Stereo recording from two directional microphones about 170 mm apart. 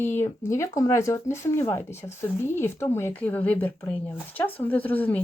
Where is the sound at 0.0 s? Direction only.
15° left (ahead or behind).